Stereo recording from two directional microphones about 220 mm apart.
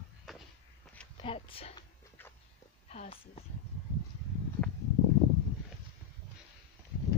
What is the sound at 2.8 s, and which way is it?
Speech, 30° left (ahead or behind).